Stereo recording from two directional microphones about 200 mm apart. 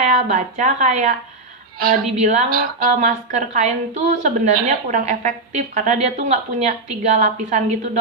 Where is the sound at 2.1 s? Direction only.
35° right (ahead or behind).